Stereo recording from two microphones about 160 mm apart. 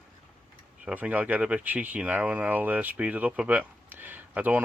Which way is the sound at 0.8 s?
10° right (ahead or behind).